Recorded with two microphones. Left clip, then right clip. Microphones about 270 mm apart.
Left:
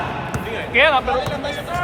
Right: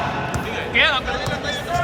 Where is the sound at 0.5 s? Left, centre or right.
Left.